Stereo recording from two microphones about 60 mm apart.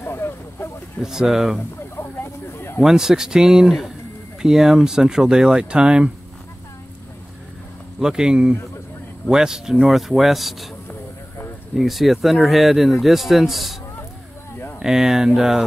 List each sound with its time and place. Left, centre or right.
0.0 s vehicle: left
1.0 s speech: centre
2.0 s a sound: left
2.8 s speech: centre
8.0 s speech: centre
11.7 s speech: centre
14.8 s speech: centre